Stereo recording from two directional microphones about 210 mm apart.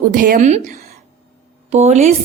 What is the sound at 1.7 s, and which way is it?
Speech, 30° right (ahead or behind).